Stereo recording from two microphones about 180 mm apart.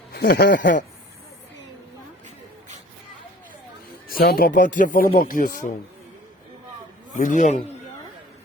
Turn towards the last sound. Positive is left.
turn(degrees=45)  # may be behind; listen again after turning